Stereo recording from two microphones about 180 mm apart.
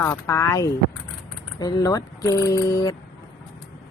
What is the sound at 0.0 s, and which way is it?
Speech, 15° left (ahead or behind).